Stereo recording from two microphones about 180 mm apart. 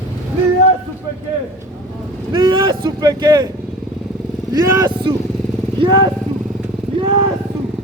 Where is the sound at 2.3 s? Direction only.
25° right (ahead or behind).